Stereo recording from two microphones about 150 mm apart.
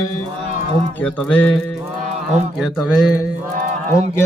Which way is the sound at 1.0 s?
10° left (ahead or behind).